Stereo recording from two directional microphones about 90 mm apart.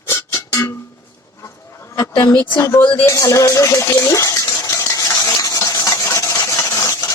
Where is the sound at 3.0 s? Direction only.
35° left (ahead or behind).